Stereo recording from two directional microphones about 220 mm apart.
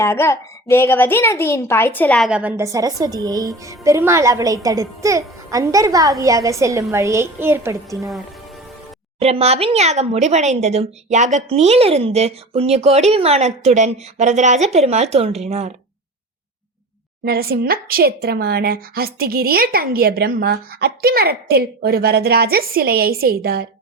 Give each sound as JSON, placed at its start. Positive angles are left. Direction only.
{"t": 0.0, "sound": "a child's voice", "side_deg": 10}
{"t": 9.1, "sound": "speech", "side_deg": -25}
{"t": 17.2, "sound": "a woman's voice", "side_deg": -45}